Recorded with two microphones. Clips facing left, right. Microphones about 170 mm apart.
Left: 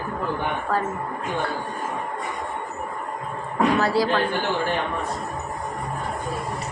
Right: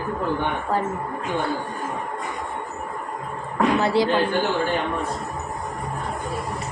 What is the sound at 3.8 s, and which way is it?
Speech, 25° right (ahead or behind).